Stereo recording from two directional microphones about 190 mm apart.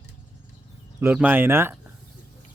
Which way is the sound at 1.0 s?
10° right (ahead or behind).